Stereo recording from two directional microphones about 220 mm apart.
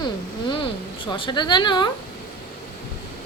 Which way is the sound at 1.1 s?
20° left (ahead or behind).